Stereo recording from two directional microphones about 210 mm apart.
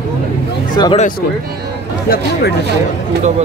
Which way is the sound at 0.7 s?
20° left (ahead or behind).